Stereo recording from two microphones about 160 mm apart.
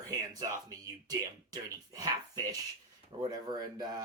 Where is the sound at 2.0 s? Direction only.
25° right (ahead or behind).